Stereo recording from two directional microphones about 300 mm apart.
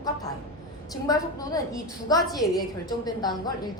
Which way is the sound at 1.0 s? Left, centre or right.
Centre.